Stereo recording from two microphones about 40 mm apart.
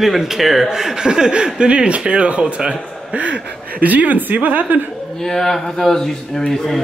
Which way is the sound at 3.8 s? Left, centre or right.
Right.